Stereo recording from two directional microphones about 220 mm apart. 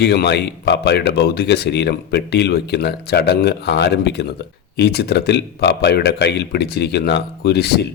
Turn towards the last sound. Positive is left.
turn(degrees=45)  # may be behind; listen again after turning